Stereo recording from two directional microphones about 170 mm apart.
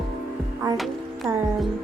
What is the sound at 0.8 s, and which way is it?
Music, centre (ahead or behind).